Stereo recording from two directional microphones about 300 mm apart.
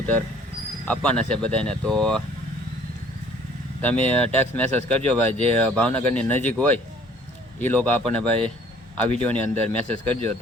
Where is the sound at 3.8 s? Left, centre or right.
Centre.